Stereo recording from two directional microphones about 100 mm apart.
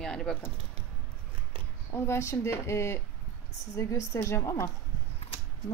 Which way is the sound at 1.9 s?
30° left (ahead or behind).